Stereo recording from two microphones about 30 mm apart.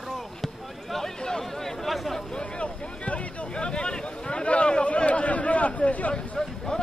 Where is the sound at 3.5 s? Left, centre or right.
Left.